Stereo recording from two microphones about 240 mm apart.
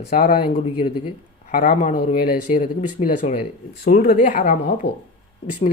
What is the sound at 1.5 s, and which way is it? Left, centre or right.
Speech, left.